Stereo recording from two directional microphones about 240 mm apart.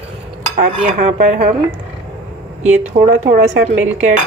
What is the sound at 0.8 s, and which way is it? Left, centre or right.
Speech, right.